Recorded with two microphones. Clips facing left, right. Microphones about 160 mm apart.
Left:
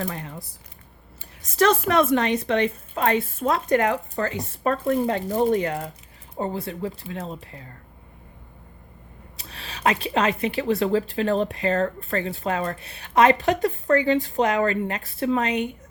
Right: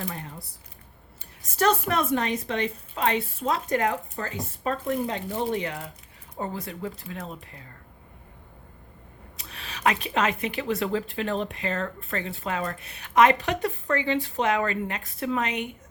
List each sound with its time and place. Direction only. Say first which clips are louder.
0.0 s a sound: left 4 dB; 90° left
1.5 s a woman's voice: left 4 dB; 90° left; by 5.9 s 45° left (ahead or behind)
6.3 s speech: left 5 dB; 30° left (ahead or behind)
9.4 s speech: left 1 dB; 30° left (ahead or behind)